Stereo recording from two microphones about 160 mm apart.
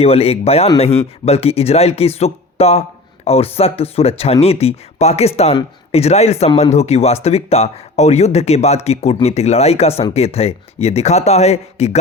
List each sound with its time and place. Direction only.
0.0 s speech: 40° left (ahead or behind)